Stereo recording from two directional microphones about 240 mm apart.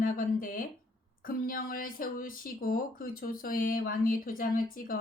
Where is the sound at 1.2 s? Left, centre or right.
Left.